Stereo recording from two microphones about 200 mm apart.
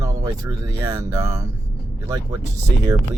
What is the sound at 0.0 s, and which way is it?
Speech, 15° right (ahead or behind).